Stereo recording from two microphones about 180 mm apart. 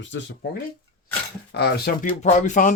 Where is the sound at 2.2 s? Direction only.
40° left (ahead or behind).